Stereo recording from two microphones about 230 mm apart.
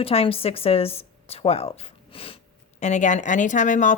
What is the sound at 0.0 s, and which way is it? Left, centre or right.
A woman's voice, left.